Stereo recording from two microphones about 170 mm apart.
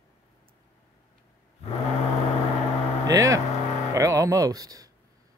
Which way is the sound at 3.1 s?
20° right (ahead or behind).